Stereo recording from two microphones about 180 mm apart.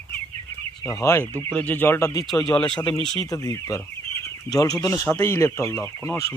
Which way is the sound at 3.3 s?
20° left (ahead or behind).